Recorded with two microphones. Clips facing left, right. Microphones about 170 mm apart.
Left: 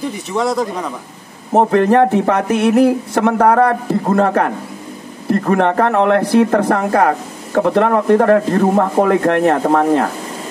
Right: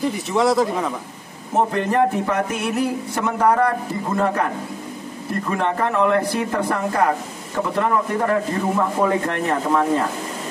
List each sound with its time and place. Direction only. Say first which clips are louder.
0.1 s speech: even; centre (ahead or behind)
1.5 s speech: left 8 dB; 65° left (ahead or behind)